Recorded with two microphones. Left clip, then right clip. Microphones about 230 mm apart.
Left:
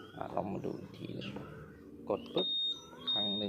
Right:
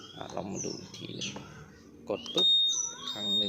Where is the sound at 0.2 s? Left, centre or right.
Right.